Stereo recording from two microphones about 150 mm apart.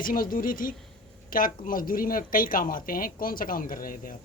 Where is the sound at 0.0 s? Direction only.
70° left (ahead or behind).